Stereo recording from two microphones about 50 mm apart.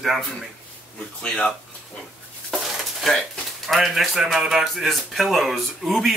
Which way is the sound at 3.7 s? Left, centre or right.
Centre.